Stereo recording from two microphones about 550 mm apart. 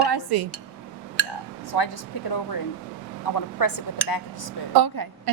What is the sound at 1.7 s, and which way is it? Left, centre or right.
Speech, left.